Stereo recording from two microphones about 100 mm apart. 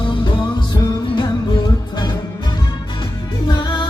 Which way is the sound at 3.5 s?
50° left (ahead or behind).